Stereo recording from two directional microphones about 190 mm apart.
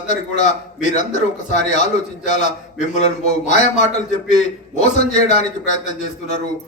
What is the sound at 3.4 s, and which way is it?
A man's voice, 40° left (ahead or behind).